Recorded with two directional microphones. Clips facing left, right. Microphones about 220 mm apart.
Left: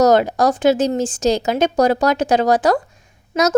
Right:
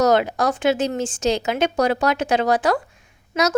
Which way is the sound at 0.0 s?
40° left (ahead or behind).